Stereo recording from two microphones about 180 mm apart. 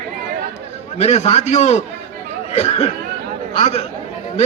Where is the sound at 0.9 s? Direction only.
35° left (ahead or behind).